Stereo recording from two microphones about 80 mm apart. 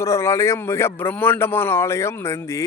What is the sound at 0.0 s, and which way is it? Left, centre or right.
Speech, left.